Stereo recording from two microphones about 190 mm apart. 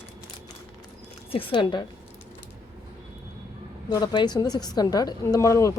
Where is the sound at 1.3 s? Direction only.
30° left (ahead or behind).